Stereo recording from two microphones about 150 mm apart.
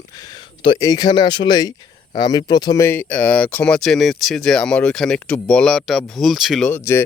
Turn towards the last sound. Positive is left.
turn(degrees=15)  # may be behind; listen again after turning